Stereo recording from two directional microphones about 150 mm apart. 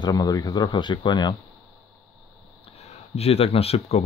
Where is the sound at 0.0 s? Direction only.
25° left (ahead or behind).